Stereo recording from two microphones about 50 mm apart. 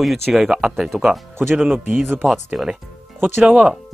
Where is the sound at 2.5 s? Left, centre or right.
Centre.